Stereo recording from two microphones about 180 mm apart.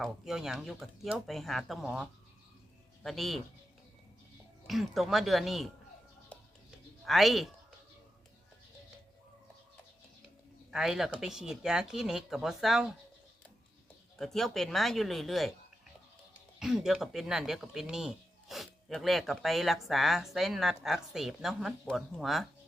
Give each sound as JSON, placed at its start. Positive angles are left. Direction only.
{"t": 0.0, "sound": "speech", "side_deg": 0}
{"t": 4.6, "sound": "speech", "side_deg": 0}
{"t": 7.0, "sound": "speech", "side_deg": 0}
{"t": 10.7, "sound": "speech", "side_deg": 0}
{"t": 14.2, "sound": "speech", "side_deg": 0}
{"t": 16.6, "sound": "speech", "side_deg": 0}